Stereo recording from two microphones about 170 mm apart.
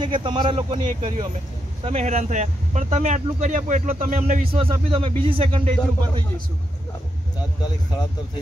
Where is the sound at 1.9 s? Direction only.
40° right (ahead or behind).